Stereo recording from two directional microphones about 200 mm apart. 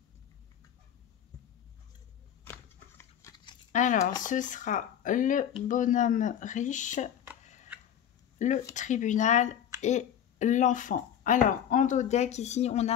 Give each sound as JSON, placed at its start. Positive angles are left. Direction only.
{"t": 2.4, "sound": "a sound", "side_deg": 10}
{"t": 3.7, "sound": "speech", "side_deg": 40}
{"t": 8.4, "sound": "speech", "side_deg": 35}